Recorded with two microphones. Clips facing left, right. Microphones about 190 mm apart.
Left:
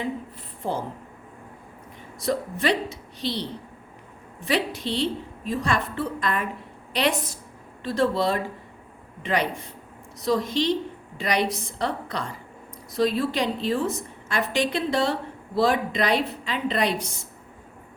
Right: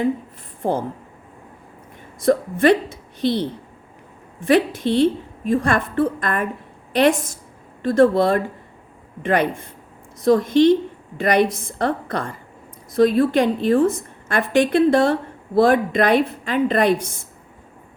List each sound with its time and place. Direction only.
0.6 s a woman's voice: 50° right (ahead or behind)
2.2 s a woman's voice: 50° right (ahead or behind)